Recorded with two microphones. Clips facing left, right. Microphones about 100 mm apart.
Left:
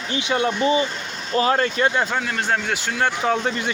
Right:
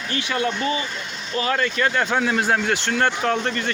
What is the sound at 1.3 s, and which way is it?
Speech, 35° left (ahead or behind).